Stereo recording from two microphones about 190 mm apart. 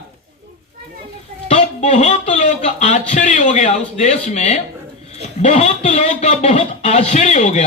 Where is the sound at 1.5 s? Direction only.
35° left (ahead or behind).